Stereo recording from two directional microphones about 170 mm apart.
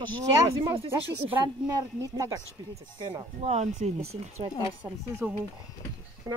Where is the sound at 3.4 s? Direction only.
40° right (ahead or behind).